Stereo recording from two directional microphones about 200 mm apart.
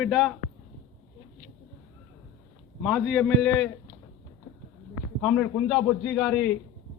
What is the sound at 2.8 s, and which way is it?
Speech, centre (ahead or behind).